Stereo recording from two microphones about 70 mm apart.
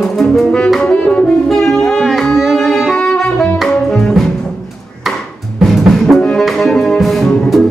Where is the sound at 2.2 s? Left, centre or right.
Centre.